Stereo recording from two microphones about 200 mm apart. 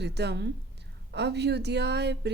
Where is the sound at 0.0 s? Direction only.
55° right (ahead or behind).